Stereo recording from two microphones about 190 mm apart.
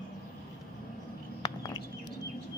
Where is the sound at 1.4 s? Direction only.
20° left (ahead or behind).